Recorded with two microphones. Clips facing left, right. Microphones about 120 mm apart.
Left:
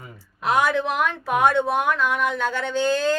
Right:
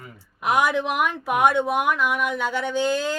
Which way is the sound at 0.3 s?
15° right (ahead or behind).